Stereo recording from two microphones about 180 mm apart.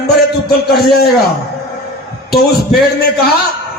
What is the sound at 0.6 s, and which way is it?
Music, 60° left (ahead or behind).